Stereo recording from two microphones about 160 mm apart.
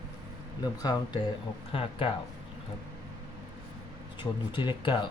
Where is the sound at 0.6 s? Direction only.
25° left (ahead or behind).